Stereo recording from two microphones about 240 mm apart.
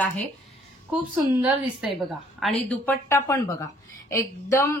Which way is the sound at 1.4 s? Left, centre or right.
Centre.